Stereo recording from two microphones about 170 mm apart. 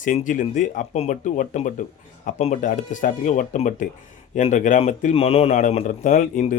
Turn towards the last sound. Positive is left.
turn(degrees=45)  # may be behind; listen again after turning